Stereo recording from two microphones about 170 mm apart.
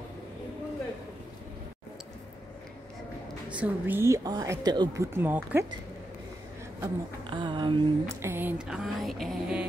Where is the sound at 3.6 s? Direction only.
15° right (ahead or behind).